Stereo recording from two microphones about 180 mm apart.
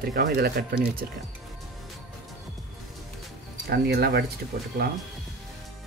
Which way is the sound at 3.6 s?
60° right (ahead or behind).